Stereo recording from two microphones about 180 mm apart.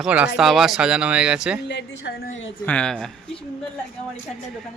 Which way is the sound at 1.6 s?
70° left (ahead or behind).